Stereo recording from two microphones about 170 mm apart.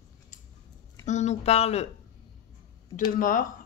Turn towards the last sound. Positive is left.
turn(degrees=50)  # may be behind; listen again after turning